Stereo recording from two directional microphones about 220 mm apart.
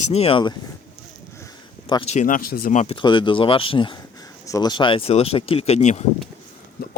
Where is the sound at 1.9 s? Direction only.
25° left (ahead or behind).